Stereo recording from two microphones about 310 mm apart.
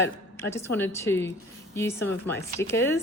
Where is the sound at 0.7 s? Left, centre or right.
Centre.